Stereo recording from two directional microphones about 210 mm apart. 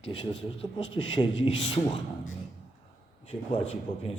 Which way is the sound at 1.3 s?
60° left (ahead or behind).